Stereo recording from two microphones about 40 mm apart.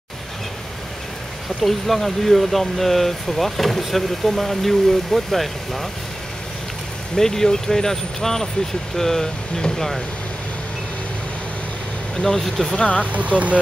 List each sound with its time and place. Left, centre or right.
1.6 s speech: centre
7.2 s speech: centre
12.2 s speech: centre
12.7 s speech: left
13.0 s speech: right